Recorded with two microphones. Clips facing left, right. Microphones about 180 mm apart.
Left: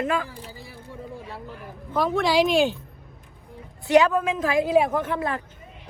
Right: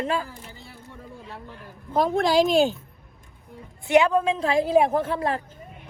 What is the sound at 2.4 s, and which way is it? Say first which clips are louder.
Speech: right 1 dB; 40° right (ahead or behind).